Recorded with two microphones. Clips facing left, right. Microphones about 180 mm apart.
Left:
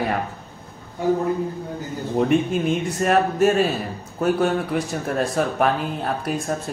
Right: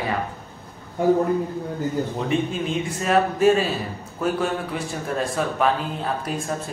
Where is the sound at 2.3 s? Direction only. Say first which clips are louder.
Left 5 dB; 55° left (ahead or behind).